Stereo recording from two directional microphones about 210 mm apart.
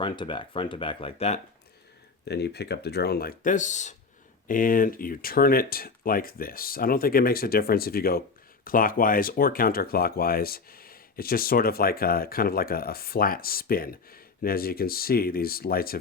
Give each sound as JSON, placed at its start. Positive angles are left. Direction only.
{"t": 0.0, "sound": "speech", "side_deg": 25}
{"t": 2.2, "sound": "speech", "side_deg": 50}